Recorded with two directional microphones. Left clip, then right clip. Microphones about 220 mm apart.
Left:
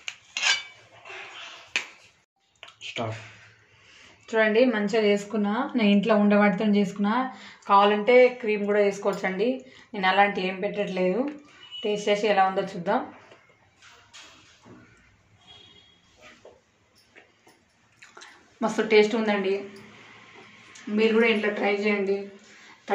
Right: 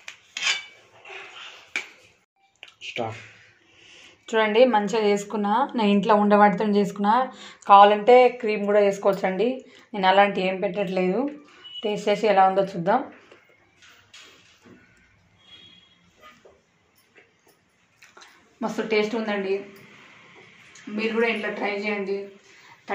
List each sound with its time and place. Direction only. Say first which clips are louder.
2.6 s a sound: right 2 dB; centre (ahead or behind)
4.3 s speech: right 3 dB; 35° right (ahead or behind)
18.2 s speech: left 2 dB; centre (ahead or behind)
20.9 s a woman's voice: left 3 dB; 5° right (ahead or behind)